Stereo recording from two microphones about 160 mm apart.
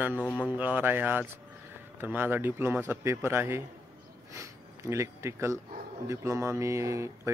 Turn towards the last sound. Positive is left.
turn(degrees=-20)  # may be behind; listen again after turning